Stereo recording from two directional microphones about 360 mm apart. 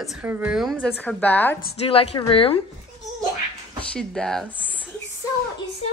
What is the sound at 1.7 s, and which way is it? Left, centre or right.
Speech, centre.